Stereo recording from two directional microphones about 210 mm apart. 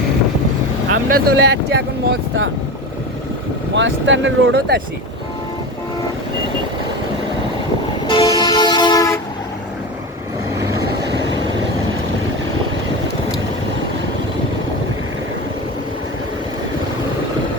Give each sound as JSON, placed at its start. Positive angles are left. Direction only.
{"t": 0.9, "sound": "speech", "side_deg": -45}
{"t": 3.8, "sound": "speech", "side_deg": -60}
{"t": 8.0, "sound": "vehicle", "side_deg": 25}